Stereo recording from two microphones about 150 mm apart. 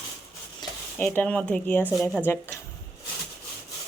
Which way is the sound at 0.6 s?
30° left (ahead or behind).